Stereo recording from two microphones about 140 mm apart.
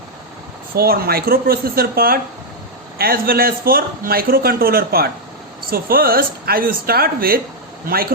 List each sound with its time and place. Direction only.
0.8 s a man's voice: 90° right